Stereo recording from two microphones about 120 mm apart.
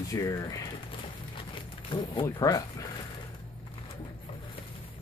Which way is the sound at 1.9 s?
40° left (ahead or behind).